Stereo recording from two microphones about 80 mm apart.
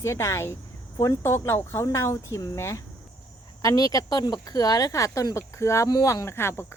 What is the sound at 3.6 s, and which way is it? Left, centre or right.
Speech, left.